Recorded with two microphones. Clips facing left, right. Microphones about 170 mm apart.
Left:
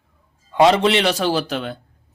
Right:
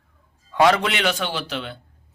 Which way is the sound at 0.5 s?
25° left (ahead or behind).